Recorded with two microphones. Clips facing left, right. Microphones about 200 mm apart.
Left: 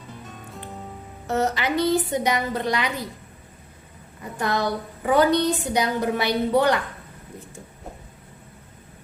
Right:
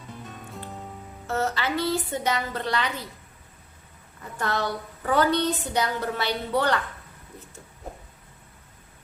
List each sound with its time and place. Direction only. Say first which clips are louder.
0.1 s music: even; centre (ahead or behind)
1.3 s a woman's voice: left 3 dB; 20° left (ahead or behind)
4.2 s a woman's voice: left 3 dB; 15° left (ahead or behind)